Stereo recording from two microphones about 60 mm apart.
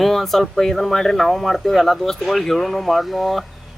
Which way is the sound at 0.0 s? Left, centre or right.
Centre.